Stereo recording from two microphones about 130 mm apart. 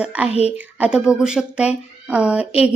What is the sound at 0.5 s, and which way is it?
Speech, 10° right (ahead or behind).